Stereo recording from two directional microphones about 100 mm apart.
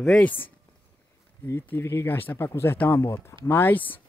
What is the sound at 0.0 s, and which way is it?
Speech, 10° left (ahead or behind).